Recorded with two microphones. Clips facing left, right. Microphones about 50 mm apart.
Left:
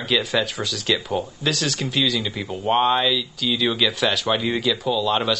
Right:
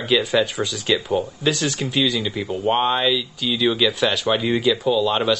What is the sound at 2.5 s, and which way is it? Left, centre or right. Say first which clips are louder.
Speech: left 1 dB; right.